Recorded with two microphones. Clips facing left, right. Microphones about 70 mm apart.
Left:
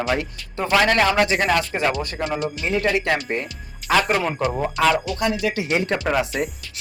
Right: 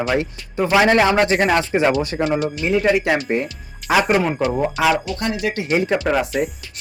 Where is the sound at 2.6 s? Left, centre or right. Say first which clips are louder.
Right 4 dB; centre.